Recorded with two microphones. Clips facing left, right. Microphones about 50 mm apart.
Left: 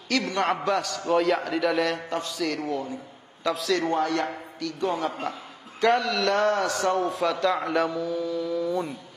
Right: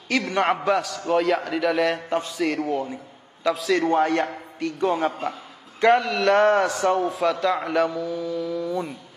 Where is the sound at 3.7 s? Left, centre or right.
Right.